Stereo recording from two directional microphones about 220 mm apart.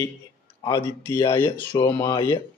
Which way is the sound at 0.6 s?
15° left (ahead or behind).